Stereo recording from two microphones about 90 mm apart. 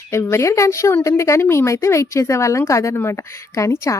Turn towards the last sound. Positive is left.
turn(degrees=35)  # may be behind; listen again after turning